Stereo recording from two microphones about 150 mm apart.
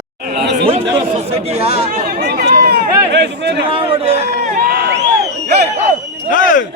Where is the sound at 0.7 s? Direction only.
40° right (ahead or behind).